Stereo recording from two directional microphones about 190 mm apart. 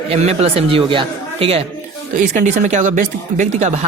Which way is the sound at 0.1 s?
35° right (ahead or behind).